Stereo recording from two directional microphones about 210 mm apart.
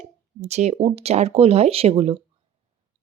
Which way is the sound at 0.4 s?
30° right (ahead or behind).